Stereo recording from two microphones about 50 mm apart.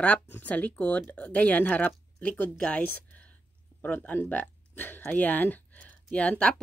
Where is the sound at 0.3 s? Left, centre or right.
Left.